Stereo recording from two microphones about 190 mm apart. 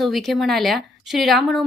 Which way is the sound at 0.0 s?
Centre (ahead or behind).